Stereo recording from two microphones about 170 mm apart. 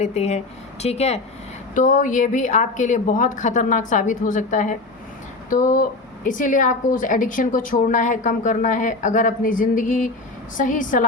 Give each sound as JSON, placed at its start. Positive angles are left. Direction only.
{"t": 0.0, "sound": "speech", "side_deg": 40}
{"t": 1.7, "sound": "speech", "side_deg": 50}